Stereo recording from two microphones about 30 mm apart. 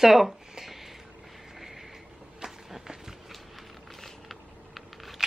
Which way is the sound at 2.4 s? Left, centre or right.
Right.